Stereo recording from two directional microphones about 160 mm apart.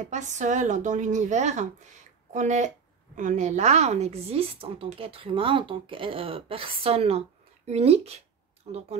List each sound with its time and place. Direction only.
0.0 s speech: 50° right (ahead or behind)